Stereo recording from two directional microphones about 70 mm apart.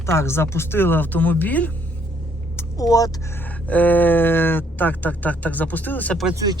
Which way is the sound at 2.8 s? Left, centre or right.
Left.